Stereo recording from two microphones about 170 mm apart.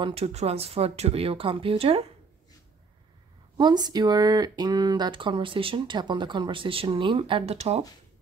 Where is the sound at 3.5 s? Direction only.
25° right (ahead or behind).